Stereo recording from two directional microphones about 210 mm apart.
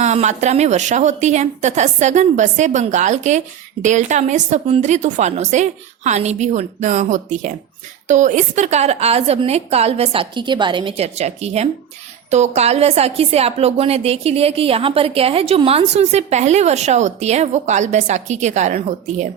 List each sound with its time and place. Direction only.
0.0 s a woman's voice: 35° right (ahead or behind)